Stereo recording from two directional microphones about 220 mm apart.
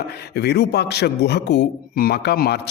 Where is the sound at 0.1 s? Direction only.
45° left (ahead or behind).